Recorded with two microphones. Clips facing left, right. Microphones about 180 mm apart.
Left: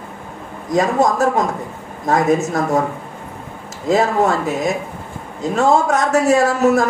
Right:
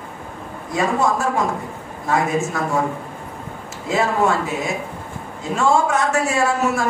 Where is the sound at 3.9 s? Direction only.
40° left (ahead or behind).